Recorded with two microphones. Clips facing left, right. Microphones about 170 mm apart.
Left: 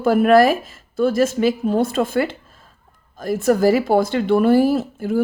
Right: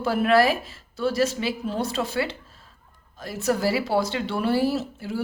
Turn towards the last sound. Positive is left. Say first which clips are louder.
# left 8 dB
turn(degrees=50)  # may be behind; listen again after turning